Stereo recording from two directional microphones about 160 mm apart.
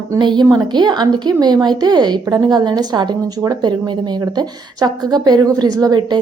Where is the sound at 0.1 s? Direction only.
25° right (ahead or behind).